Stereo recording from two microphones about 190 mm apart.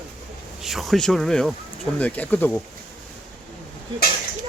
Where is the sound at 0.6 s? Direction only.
Centre (ahead or behind).